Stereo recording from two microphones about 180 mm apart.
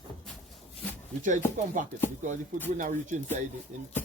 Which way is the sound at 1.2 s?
45° right (ahead or behind).